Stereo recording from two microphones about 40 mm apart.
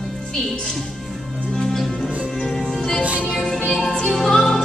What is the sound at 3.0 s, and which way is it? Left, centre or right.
Music, right.